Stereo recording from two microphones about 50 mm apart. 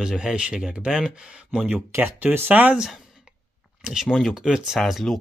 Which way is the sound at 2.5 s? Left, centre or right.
Right.